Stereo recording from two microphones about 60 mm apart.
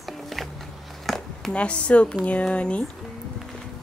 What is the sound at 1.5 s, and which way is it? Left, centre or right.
A woman's voice, centre.